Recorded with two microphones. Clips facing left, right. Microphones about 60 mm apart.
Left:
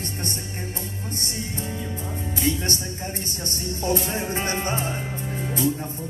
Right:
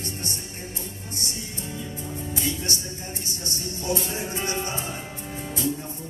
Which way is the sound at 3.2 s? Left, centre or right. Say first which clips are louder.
Left 3 dB; left.